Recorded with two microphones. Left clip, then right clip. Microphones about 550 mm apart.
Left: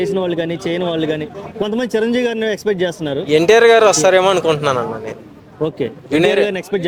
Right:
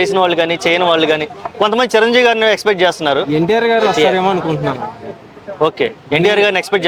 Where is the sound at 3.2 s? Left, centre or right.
Left.